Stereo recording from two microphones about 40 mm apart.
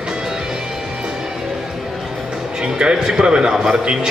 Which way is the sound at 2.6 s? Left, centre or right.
Right.